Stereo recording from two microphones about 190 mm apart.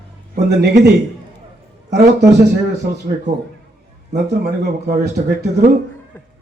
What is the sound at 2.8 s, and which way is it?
Speech, 50° right (ahead or behind).